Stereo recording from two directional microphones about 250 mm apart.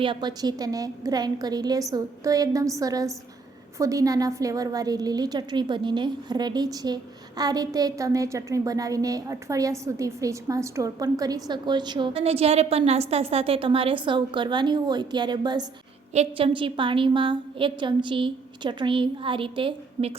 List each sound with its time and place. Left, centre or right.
0.0 s a woman's voice: centre